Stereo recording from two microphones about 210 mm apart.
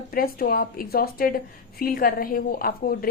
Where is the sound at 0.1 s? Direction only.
45° left (ahead or behind).